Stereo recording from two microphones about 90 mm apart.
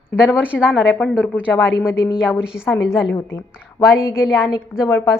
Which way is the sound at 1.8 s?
5° right (ahead or behind).